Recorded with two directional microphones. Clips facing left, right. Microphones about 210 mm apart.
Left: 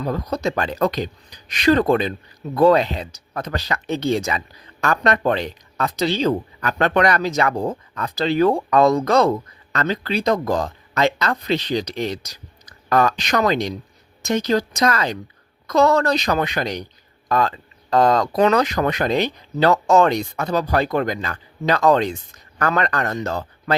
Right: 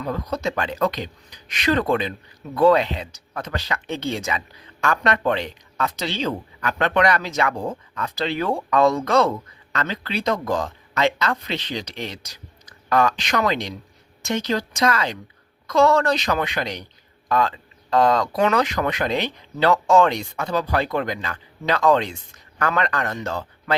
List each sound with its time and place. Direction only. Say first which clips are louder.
0.0 s speech: left 3 dB; 35° left (ahead or behind)